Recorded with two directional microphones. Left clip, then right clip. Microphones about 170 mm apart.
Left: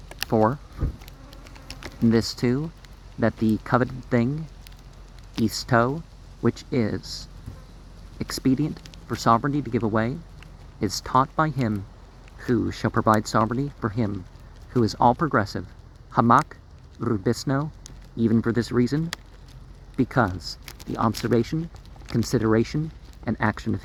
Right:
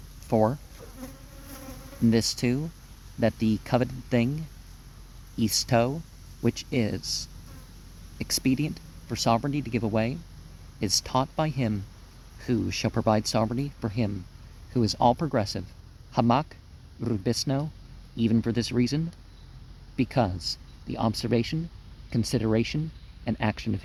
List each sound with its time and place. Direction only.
0.3 s speech: 20° right (ahead or behind)
2.0 s speech: 20° right (ahead or behind)
5.5 s speech: 20° right (ahead or behind)
17.4 s speech: 15° right (ahead or behind)
18.3 s speech: 30° right (ahead or behind)
20.0 s speech: 15° right (ahead or behind)